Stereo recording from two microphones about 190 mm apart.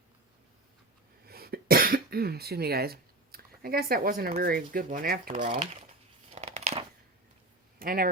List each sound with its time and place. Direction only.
1.3 s speech: 55° right (ahead or behind)
5.3 s speech: 35° right (ahead or behind)
6.3 s a sound: 35° right (ahead or behind)
7.8 s speech: 50° right (ahead or behind)